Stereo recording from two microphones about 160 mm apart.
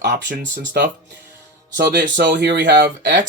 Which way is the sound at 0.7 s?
75° right (ahead or behind).